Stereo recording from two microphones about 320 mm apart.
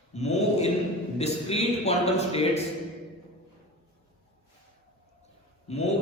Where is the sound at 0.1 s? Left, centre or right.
Left.